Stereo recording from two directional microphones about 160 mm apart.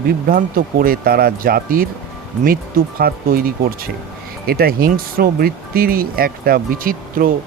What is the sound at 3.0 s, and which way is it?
Speech, 65° right (ahead or behind).